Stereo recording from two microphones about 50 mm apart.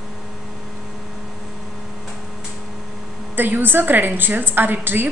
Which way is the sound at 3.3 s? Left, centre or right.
Right.